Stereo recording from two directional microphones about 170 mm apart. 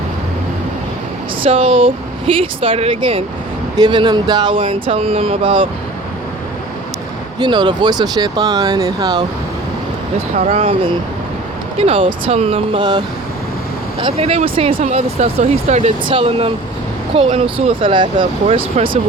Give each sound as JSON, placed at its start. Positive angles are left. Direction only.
{"t": 1.4, "sound": "speech", "side_deg": -35}
{"t": 7.3, "sound": "speech", "side_deg": -25}
{"t": 10.3, "sound": "speech", "side_deg": -40}
{"t": 14.0, "sound": "speech", "side_deg": -35}